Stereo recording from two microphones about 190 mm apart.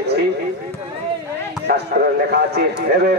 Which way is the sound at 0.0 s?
60° right (ahead or behind).